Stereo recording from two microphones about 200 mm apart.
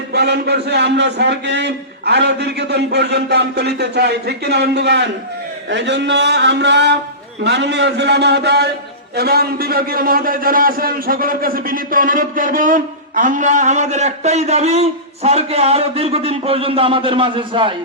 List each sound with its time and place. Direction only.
0.1 s a man's voice: 55° right (ahead or behind); by 17.7 s 25° right (ahead or behind)